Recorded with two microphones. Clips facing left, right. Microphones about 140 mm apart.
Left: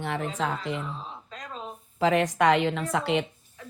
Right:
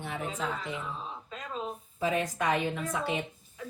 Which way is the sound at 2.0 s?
80° left.